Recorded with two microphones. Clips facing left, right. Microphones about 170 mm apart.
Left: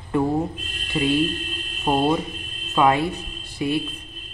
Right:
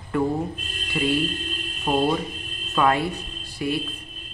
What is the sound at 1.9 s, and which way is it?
Speech, 30° left (ahead or behind).